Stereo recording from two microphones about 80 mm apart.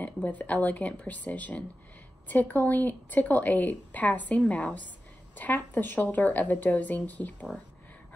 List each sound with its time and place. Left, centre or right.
0.0 s a woman's voice: centre